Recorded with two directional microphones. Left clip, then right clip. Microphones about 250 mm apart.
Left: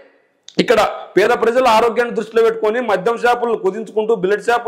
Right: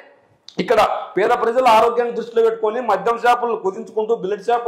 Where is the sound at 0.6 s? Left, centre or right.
Left.